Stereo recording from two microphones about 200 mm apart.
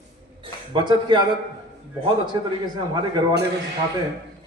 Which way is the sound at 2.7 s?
20° right (ahead or behind).